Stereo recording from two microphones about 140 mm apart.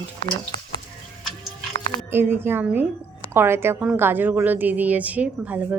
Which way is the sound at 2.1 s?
15° right (ahead or behind).